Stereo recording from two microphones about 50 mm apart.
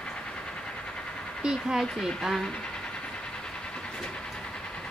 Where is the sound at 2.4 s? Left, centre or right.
Centre.